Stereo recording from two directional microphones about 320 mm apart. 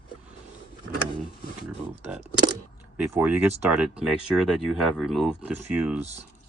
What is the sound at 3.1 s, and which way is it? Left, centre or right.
Speech, centre.